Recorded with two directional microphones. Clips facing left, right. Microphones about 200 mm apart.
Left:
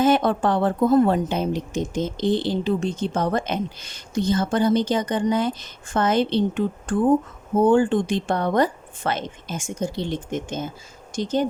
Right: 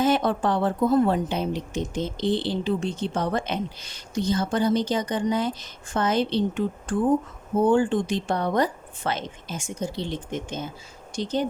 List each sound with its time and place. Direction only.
0.0 s a woman's voice: 50° left (ahead or behind)